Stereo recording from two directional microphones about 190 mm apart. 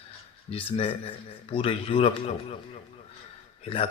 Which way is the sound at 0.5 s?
30° left (ahead or behind).